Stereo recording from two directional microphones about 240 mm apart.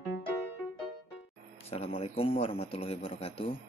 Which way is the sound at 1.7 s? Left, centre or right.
Left.